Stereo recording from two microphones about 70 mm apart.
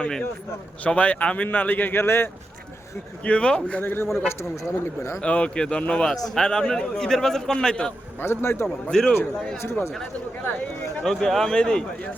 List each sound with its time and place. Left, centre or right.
0.0 s a man's voice: centre; by 2.3 s left
3.2 s a man's voice: centre
3.8 s a man's voice: left
5.2 s a man's voice: centre
8.2 s a man's voice: left
8.6 s a man's voice: centre
11.0 s a man's voice: centre